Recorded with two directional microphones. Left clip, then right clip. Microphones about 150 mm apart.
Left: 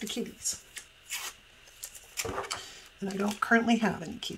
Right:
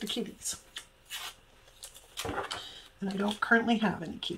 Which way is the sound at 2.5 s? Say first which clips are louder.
Left 1 dB; 25° left (ahead or behind).